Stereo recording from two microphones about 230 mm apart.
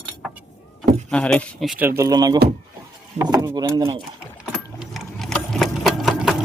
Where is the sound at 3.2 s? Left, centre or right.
Centre.